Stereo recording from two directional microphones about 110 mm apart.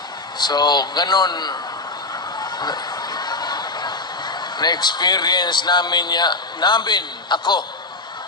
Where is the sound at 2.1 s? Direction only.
40° left (ahead or behind).